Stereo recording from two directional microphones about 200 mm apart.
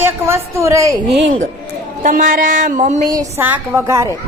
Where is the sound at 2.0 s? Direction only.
40° right (ahead or behind).